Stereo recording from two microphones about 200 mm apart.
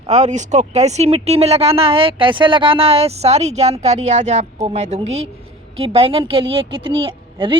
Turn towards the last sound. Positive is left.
turn(degrees=-25)  # may be behind; listen again after turning